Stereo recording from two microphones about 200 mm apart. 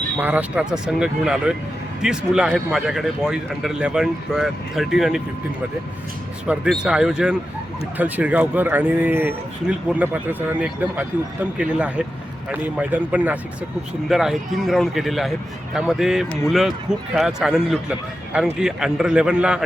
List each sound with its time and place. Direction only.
0.2 s speech: 10° right (ahead or behind)
6.5 s speech: 5° right (ahead or behind)